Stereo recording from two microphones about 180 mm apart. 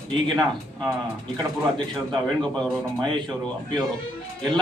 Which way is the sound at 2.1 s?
5° left (ahead or behind).